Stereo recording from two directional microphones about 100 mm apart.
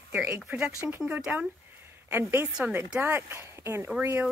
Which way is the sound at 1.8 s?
25° right (ahead or behind).